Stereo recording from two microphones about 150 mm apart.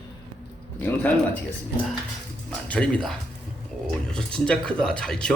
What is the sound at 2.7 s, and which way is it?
Speech, 5° left (ahead or behind).